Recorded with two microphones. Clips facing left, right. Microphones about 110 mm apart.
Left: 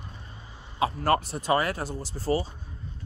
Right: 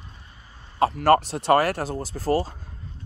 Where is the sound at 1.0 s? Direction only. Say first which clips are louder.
Right 8 dB; 75° right (ahead or behind).